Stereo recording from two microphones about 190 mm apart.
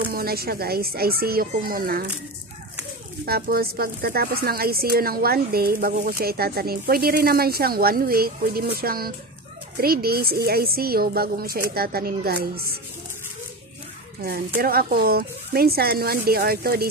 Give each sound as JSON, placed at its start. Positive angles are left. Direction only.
{"t": 0.1, "sound": "speech", "side_deg": -55}
{"t": 3.3, "sound": "speech", "side_deg": -55}
{"t": 14.6, "sound": "speech", "side_deg": -50}